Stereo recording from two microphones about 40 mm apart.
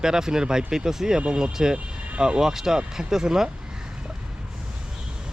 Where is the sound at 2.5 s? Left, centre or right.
Centre.